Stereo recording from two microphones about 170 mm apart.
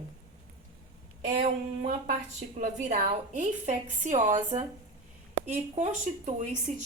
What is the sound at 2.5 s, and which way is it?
A woman's voice, 45° right (ahead or behind).